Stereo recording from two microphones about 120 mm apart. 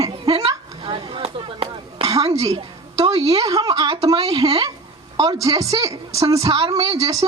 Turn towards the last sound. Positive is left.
turn(degrees=-30)  # may be behind; listen again after turning